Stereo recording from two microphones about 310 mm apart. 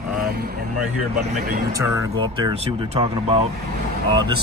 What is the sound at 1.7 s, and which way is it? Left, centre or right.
Speech, centre.